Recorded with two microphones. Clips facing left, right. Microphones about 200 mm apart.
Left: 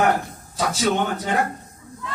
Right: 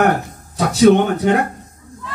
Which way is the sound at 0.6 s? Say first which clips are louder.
Right 10 dB; 60° right (ahead or behind).